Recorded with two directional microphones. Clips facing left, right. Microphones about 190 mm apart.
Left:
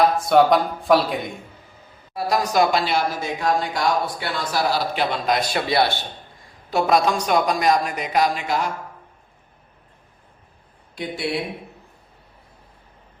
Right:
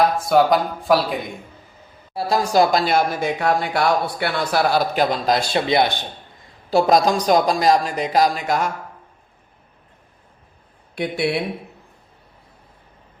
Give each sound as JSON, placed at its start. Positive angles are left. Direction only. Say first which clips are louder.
{"t": 0.0, "sound": "speech", "louder": "even", "side_deg": 0}
{"t": 2.1, "sound": "a man's voice", "louder": "right 2 dB", "side_deg": -30}
{"t": 2.8, "sound": "speech", "louder": "right 4 dB", "side_deg": -50}
{"t": 4.9, "sound": "a man's voice", "louder": "right 3 dB", "side_deg": -35}
{"t": 6.7, "sound": "speech", "louder": "right 3 dB", "side_deg": -35}
{"t": 10.9, "sound": "speech", "louder": "right 5 dB", "side_deg": -65}